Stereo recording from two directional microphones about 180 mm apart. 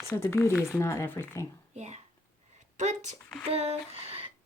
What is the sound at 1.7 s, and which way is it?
Speech, 40° right (ahead or behind).